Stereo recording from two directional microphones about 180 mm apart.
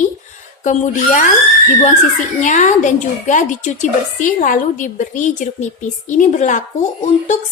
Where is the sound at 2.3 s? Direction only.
40° left (ahead or behind).